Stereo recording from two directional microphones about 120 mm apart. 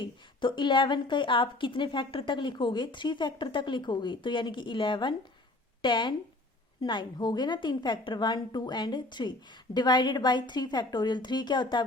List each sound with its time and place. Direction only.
0.0 s a woman's voice: 40° left (ahead or behind)